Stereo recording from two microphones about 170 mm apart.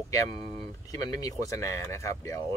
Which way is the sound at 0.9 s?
20° left (ahead or behind).